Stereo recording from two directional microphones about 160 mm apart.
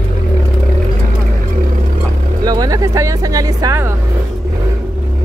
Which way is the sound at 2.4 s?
25° right (ahead or behind).